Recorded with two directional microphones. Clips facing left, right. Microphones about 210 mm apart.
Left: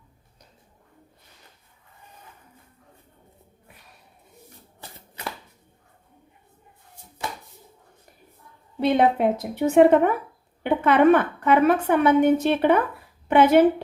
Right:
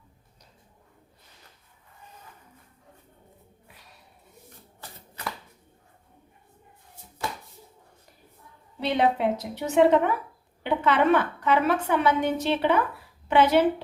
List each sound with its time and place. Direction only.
8.8 s a woman's voice: 50° left (ahead or behind)